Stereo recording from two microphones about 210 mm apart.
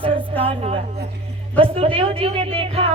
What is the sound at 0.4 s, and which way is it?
A woman's voice, 25° right (ahead or behind).